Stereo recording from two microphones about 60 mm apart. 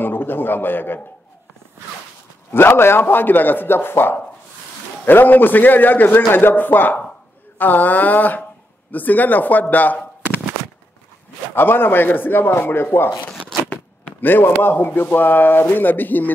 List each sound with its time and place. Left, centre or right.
0.0 s a man's voice: left
2.5 s a man's voice: left
11.5 s a man's voice: left
14.2 s a man's voice: left